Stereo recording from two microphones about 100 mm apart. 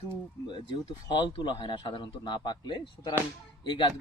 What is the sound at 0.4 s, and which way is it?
Speech, 50° left (ahead or behind).